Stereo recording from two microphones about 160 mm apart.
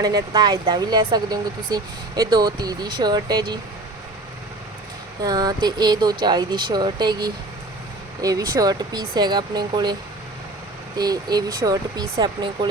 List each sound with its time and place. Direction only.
0.0 s speech: 25° right (ahead or behind)
5.2 s speech: 25° right (ahead or behind)
10.9 s speech: 25° right (ahead or behind)